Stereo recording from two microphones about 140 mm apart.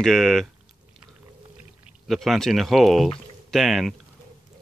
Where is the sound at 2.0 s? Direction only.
Centre (ahead or behind).